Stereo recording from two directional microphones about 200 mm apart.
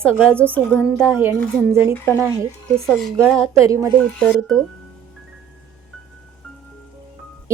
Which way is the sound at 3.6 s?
15° right (ahead or behind).